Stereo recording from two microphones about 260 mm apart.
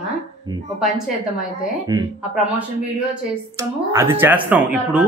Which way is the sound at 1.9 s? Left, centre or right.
Centre.